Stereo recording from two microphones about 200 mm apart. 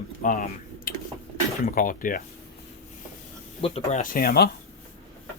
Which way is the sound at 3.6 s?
30° left (ahead or behind).